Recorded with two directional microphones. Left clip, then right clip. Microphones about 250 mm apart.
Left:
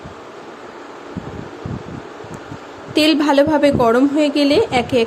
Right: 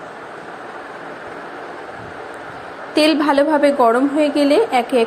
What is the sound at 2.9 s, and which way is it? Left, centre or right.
A woman's voice, centre.